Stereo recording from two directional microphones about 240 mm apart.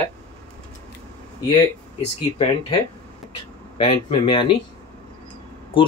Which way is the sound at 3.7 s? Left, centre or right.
Left.